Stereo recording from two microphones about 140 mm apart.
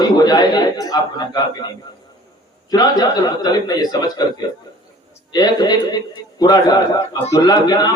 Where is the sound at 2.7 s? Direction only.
30° left (ahead or behind).